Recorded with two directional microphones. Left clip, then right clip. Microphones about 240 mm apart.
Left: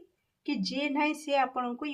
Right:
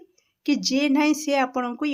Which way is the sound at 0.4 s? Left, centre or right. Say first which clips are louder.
Right 10 dB; right.